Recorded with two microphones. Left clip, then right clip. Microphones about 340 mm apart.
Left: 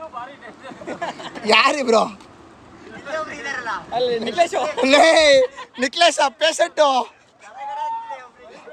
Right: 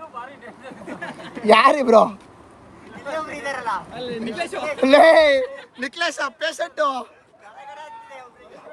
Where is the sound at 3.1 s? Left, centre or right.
Centre.